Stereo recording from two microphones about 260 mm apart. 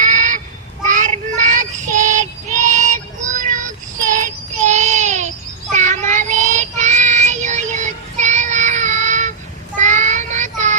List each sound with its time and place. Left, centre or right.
0.0 s honk: right
0.9 s child singing: right